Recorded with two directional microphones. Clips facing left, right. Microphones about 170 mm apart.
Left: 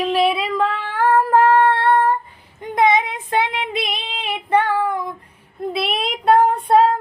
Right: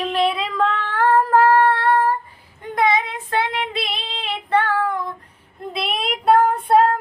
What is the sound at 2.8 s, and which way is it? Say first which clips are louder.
Child singing: left 3 dB; 20° left (ahead or behind).